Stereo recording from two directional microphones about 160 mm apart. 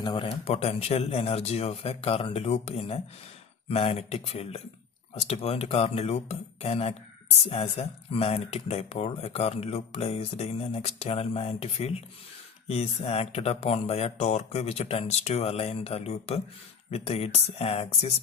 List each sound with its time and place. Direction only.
0.0 s speech: 35° left (ahead or behind)